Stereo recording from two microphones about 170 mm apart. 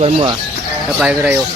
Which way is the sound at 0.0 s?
35° right (ahead or behind).